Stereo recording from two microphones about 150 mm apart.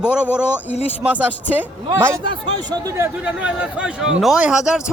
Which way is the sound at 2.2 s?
30° right (ahead or behind).